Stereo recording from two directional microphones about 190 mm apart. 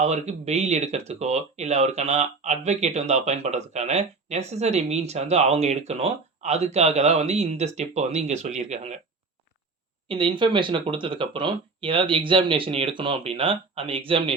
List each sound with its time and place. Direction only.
0.0 s speech: 35° right (ahead or behind)
10.1 s speech: 25° right (ahead or behind)